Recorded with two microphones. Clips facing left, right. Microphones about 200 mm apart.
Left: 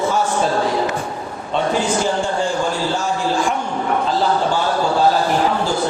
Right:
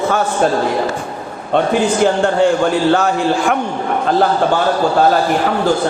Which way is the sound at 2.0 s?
65° right (ahead or behind).